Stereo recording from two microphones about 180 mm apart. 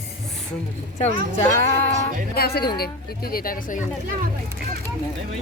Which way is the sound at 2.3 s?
60° left (ahead or behind).